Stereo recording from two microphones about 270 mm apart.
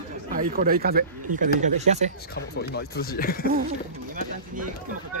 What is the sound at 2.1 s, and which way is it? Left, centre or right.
Speech, left.